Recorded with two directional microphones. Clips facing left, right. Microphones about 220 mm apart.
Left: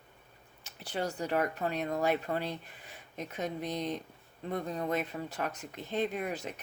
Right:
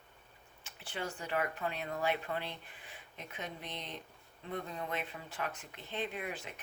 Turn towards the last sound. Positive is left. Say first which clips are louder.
# left 6 dB
turn(degrees=40)  # may be behind; listen again after turning